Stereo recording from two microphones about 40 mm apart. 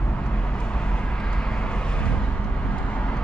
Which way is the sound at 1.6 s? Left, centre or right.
Left.